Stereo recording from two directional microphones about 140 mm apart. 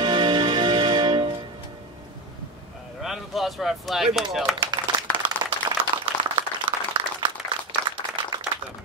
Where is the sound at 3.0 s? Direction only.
Centre (ahead or behind).